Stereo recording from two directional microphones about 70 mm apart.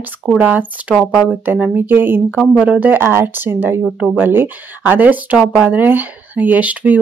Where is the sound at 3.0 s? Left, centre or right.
Right.